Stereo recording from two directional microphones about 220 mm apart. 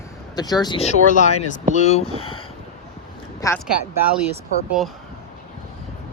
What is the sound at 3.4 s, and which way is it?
Speech, 15° left (ahead or behind).